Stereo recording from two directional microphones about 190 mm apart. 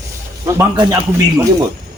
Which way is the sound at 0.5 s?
15° right (ahead or behind).